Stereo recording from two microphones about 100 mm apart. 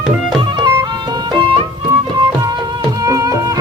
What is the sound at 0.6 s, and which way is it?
Music, 45° right (ahead or behind).